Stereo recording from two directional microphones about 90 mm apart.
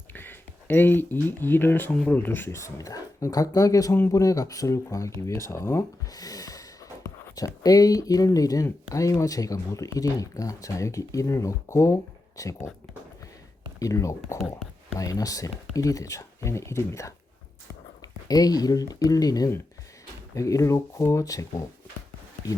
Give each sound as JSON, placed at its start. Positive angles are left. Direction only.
{"t": 0.1, "sound": "speech", "side_deg": 20}
{"t": 3.9, "sound": "speech", "side_deg": 25}
{"t": 4.2, "sound": "speech", "side_deg": 40}
{"t": 13.7, "sound": "speech", "side_deg": 40}
{"t": 18.3, "sound": "speech", "side_deg": 45}